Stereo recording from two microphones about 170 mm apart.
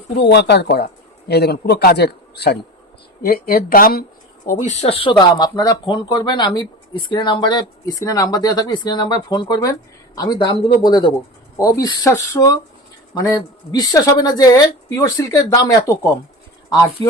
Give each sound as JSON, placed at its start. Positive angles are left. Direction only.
{"t": 0.2, "sound": "a man's voice", "side_deg": 80}
{"t": 3.2, "sound": "speech", "side_deg": 60}
{"t": 4.4, "sound": "speech", "side_deg": 50}
{"t": 5.1, "sound": "speech", "side_deg": 25}